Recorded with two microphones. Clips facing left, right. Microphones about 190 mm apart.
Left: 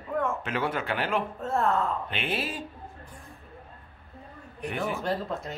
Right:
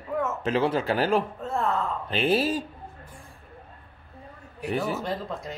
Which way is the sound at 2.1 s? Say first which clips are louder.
Right 8 dB; 35° right (ahead or behind).